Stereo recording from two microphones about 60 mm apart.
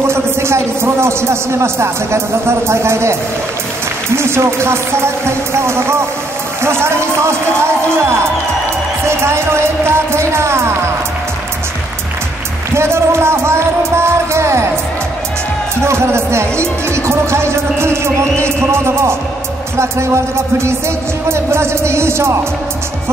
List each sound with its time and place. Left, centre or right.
0.0 s speech: right
12.7 s speech: right
15.8 s speech: right